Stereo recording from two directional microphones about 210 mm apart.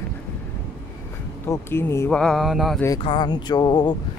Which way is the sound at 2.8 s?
20° left (ahead or behind).